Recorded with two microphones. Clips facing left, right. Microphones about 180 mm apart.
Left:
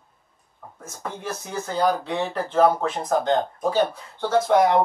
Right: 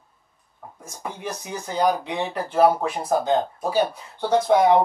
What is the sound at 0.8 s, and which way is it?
Speech, 15° right (ahead or behind).